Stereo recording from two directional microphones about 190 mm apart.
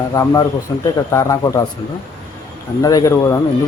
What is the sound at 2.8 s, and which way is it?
Speech, 20° left (ahead or behind).